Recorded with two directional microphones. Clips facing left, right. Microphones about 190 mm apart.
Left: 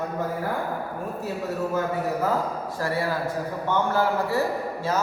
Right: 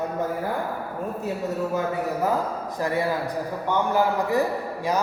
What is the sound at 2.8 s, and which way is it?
A man's voice, 20° right (ahead or behind).